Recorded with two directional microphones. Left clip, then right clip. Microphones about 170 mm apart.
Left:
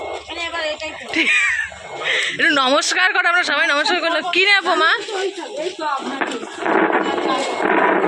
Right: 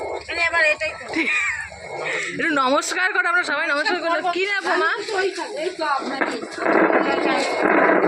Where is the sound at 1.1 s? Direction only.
5° right (ahead or behind); by 4.9 s 20° left (ahead or behind).